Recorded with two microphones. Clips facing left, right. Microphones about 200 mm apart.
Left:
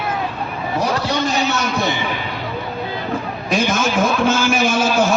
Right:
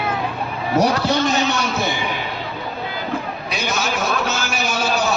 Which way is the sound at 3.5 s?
50° left (ahead or behind).